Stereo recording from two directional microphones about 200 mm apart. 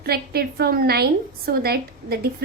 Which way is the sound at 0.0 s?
50° right (ahead or behind).